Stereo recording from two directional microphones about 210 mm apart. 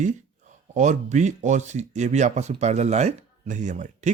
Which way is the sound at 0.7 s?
35° right (ahead or behind).